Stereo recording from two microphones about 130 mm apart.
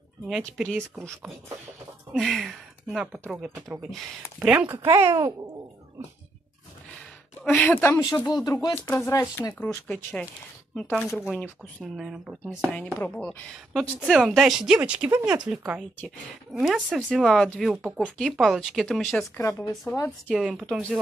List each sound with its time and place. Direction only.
0.4 s speech: 5° left (ahead or behind); by 4.6 s 10° right (ahead or behind)
4.8 s a child's voice: 20° right (ahead or behind)
7.5 s speech: 15° left (ahead or behind)
8.0 s speech: 30° left (ahead or behind)
8.7 s speech: 15° left (ahead or behind)
9.1 s speech: 25° left (ahead or behind)
9.4 s speech: 15° left (ahead or behind)
12.0 s speech: 5° right (ahead or behind)
13.0 s speech: 10° left (ahead or behind)
13.7 s speech: centre (ahead or behind)
19.3 s speech: 20° left (ahead or behind)
20.2 s speech: 5° right (ahead or behind)